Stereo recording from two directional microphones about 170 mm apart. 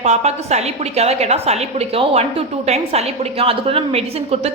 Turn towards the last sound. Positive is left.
turn(degrees=-35)  # may be behind; listen again after turning